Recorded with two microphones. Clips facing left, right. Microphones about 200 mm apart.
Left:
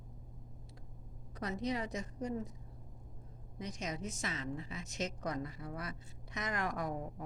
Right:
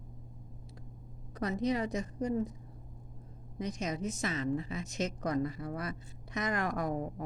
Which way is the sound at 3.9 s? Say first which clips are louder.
Right 6 dB; 50° right (ahead or behind).